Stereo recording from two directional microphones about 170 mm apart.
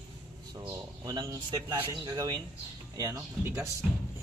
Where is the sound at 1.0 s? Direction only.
25° right (ahead or behind).